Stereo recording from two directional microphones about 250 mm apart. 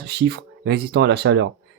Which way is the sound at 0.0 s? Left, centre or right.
Right.